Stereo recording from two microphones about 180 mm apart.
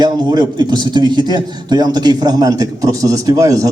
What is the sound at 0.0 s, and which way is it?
A man's voice, 25° right (ahead or behind).